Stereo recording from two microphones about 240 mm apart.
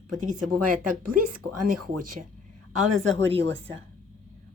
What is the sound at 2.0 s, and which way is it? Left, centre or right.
Speech, right.